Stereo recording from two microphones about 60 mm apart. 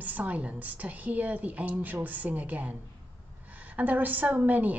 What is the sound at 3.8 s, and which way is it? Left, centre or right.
Speech, right.